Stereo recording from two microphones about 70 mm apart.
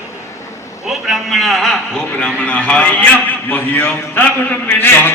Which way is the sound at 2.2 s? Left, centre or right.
Centre.